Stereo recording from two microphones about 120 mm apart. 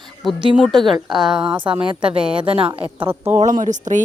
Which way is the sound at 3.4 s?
90° right.